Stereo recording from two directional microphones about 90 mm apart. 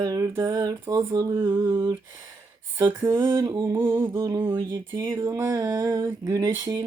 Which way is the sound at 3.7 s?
25° right (ahead or behind).